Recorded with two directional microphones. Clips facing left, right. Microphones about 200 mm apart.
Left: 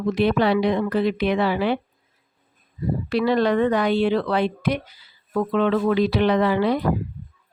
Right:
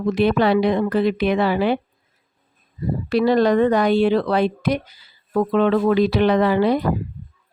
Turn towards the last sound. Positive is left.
turn(degrees=-45)  # may be behind; listen again after turning